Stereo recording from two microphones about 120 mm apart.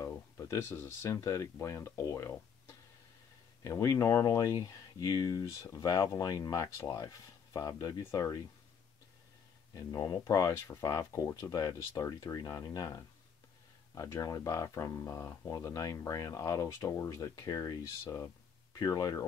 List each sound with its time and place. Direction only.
0.4 s speech: 25° left (ahead or behind)
9.8 s speech: 35° left (ahead or behind)